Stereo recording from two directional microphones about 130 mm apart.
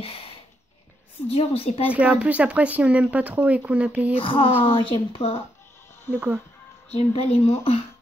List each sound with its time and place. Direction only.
0.0 s a sound: 50° left (ahead or behind)
1.3 s speech: 50° left (ahead or behind)
2.0 s speech: 10° right (ahead or behind)
4.1 s speech: 45° left (ahead or behind)
6.1 s speech: 15° right (ahead or behind)
6.9 s speech: 55° left (ahead or behind)